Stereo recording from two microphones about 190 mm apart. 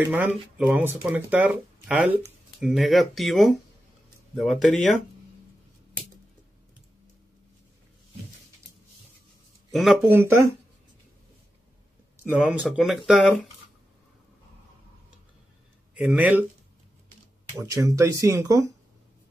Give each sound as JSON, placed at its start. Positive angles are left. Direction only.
{"t": 0.1, "sound": "speech", "side_deg": -5}
{"t": 9.7, "sound": "speech", "side_deg": 0}
{"t": 10.0, "sound": "speech", "side_deg": -15}
{"t": 12.3, "sound": "speech", "side_deg": -5}
{"t": 15.9, "sound": "speech", "side_deg": -5}
{"t": 17.6, "sound": "speech", "side_deg": -15}